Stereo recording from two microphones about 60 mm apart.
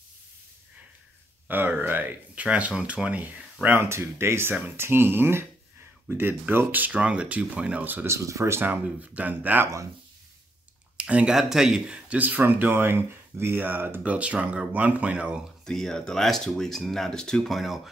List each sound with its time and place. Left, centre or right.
1.5 s speech: right
2.4 s speech: right
3.8 s speech: right
6.9 s speech: centre
7.8 s speech: right
8.1 s speech: right
8.5 s speech: right
11.0 s speech: centre
11.3 s a man's voice: centre
12.2 s speech: right
14.0 s speech: right
15.6 s speech: centre